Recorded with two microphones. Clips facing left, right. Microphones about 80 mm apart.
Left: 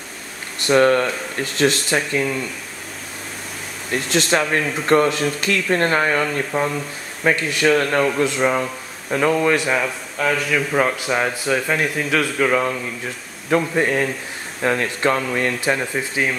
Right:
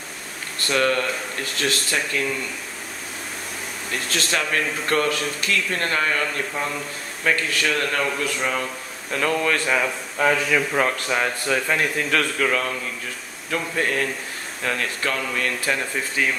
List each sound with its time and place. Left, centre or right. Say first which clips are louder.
0.6 s speech: left 7 dB; left
3.9 s a man's voice: left 7 dB; left
10.1 s a man's voice: even; centre
12.4 s a man's voice: left 4 dB; centre